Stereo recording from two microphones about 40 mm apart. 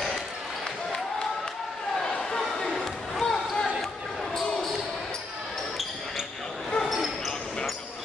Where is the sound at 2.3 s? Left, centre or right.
Centre.